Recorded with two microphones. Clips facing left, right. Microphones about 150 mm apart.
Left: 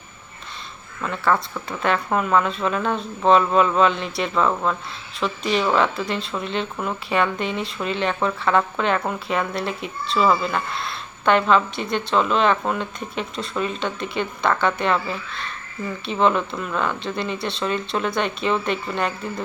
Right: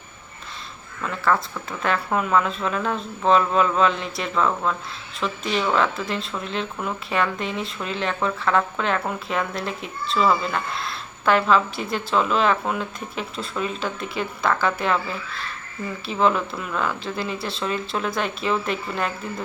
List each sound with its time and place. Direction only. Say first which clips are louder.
1.0 s speech: left 1 dB; centre (ahead or behind)